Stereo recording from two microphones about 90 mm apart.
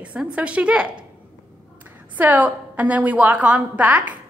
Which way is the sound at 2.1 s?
20° right (ahead or behind).